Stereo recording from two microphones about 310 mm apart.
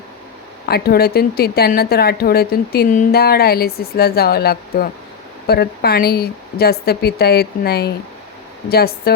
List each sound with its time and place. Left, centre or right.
0.7 s a woman's voice: left